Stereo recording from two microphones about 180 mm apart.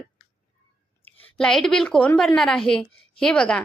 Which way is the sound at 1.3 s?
5° left (ahead or behind).